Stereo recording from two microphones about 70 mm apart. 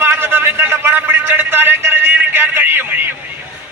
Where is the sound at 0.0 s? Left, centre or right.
Right.